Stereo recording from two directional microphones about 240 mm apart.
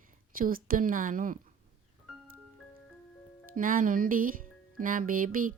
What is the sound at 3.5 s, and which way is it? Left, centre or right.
Speech, right.